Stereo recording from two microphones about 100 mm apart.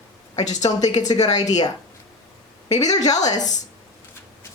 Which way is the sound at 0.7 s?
40° left (ahead or behind).